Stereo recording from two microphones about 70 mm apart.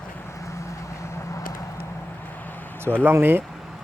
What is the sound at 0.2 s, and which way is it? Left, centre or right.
Vehicle, left.